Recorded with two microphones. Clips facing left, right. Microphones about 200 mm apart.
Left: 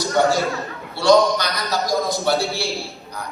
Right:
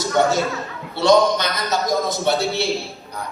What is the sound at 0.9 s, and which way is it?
A woman's voice, 20° right (ahead or behind).